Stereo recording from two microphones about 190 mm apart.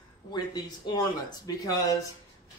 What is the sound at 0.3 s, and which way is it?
Speech, 20° left (ahead or behind).